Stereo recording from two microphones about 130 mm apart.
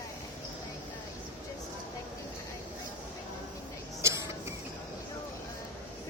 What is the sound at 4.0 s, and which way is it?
Creak, 20° right (ahead or behind).